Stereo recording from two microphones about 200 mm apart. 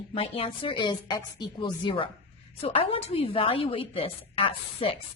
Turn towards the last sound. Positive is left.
turn(degrees=25)  # may be behind; listen again after turning